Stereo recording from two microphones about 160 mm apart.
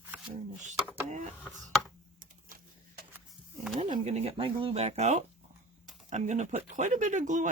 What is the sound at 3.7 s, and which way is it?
Speech, 40° right (ahead or behind).